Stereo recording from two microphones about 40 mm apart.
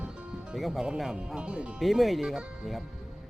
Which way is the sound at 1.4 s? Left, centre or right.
Right.